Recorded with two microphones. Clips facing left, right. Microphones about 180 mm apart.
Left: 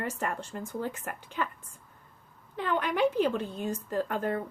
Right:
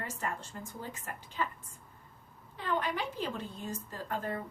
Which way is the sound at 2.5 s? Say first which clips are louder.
Left 5 dB; 70° left (ahead or behind).